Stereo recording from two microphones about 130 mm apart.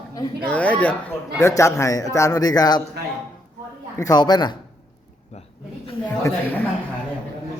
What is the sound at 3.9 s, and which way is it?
Speech, 30° left (ahead or behind).